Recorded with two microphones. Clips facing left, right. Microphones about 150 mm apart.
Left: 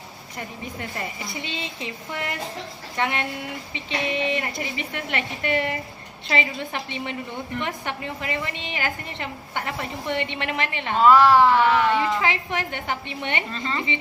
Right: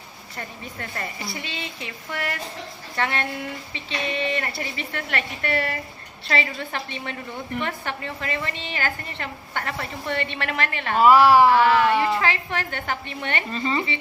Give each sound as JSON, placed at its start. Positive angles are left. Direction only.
{"t": 0.3, "sound": "a woman's voice", "side_deg": 15}
{"t": 10.9, "sound": "speech", "side_deg": -10}
{"t": 11.5, "sound": "a woman's voice", "side_deg": 20}
{"t": 13.5, "sound": "speech", "side_deg": -10}